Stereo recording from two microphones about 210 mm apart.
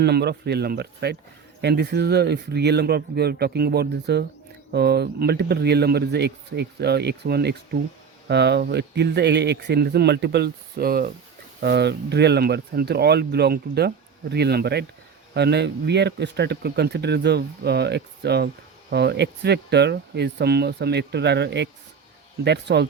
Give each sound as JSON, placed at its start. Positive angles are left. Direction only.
{"t": 0.0, "sound": "speech", "side_deg": -50}